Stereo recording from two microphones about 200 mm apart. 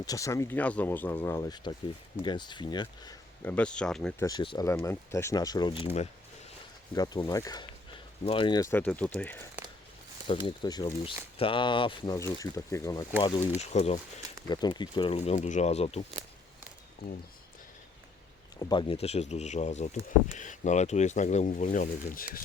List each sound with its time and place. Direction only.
0.0 s speech: 15° left (ahead or behind)
3.4 s speech: 5° left (ahead or behind)
4.2 s speech: 20° left (ahead or behind)
6.9 s speech: 20° left (ahead or behind)
8.7 s speech: 5° left (ahead or behind)
10.2 s speech: 25° left (ahead or behind)
13.6 s speech: 35° left (ahead or behind)
14.4 s speech: 20° left (ahead or behind)
18.6 s speech: 25° left (ahead or behind); by 22.3 s 45° left (ahead or behind)